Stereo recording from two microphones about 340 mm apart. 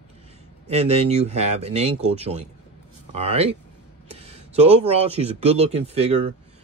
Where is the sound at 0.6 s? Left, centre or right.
Centre.